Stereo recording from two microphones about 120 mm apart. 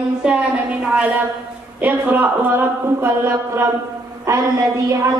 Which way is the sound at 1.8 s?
15° right (ahead or behind).